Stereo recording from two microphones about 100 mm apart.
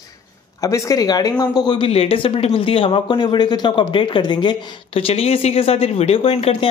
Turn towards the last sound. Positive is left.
turn(degrees=85)